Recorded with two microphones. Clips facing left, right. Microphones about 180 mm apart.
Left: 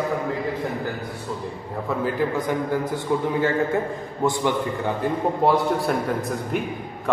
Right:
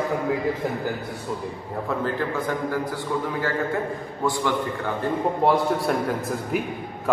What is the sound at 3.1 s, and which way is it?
A man's voice, 20° left (ahead or behind).